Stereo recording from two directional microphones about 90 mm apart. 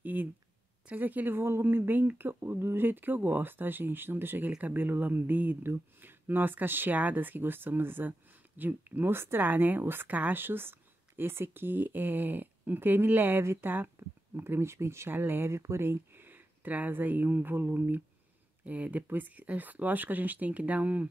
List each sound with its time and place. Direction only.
0.0 s a woman's voice: 20° right (ahead or behind)